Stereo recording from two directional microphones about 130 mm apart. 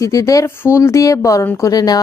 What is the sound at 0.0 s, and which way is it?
A woman's voice, 25° left (ahead or behind).